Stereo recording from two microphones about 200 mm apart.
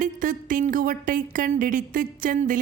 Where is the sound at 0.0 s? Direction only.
40° right (ahead or behind).